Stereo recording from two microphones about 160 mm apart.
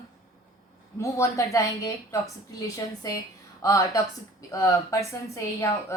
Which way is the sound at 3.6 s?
20° left (ahead or behind).